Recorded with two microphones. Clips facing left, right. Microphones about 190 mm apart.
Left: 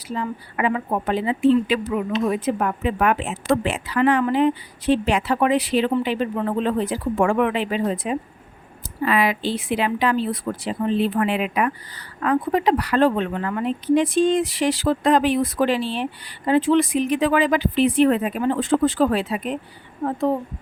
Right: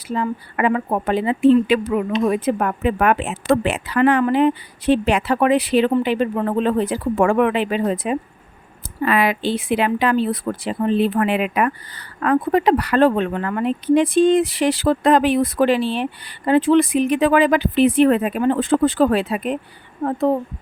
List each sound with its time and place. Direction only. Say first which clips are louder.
0.1 s speech: right 4 dB; 55° right (ahead or behind)